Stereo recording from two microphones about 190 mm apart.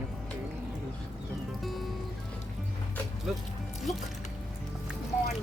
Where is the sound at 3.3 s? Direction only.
Centre (ahead or behind).